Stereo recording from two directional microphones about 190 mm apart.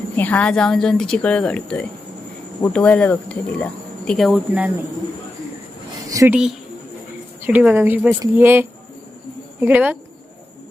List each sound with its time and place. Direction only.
0.2 s speech: 10° left (ahead or behind)
6.1 s a sound: 15° right (ahead or behind)
6.3 s speech: 5° right (ahead or behind)